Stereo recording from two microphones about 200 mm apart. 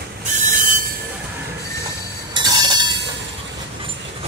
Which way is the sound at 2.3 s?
20° right (ahead or behind).